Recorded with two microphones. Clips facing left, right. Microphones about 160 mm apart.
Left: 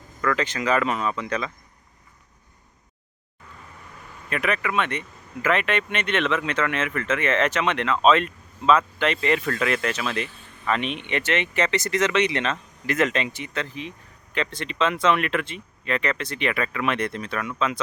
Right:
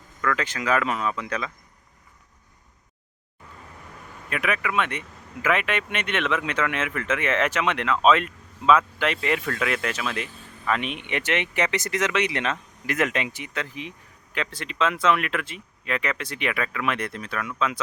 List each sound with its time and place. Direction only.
0.3 s speech: 5° right (ahead or behind)
4.3 s speech: 5° right (ahead or behind)